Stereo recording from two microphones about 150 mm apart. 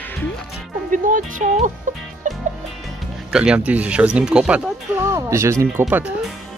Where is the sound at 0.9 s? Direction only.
60° right (ahead or behind).